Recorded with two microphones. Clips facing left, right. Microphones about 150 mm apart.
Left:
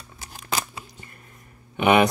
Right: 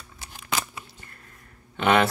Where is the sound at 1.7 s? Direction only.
15° left (ahead or behind).